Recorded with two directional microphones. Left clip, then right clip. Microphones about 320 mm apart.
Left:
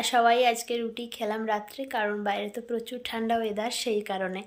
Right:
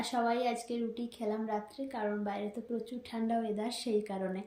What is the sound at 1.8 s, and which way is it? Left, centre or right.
Speech, centre.